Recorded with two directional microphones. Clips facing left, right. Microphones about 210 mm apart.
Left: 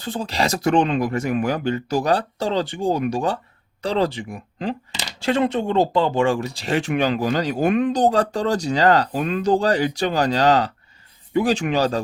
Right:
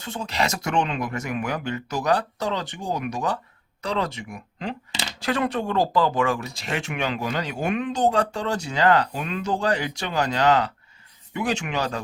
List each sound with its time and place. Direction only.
0.0 s speech: 35° left (ahead or behind)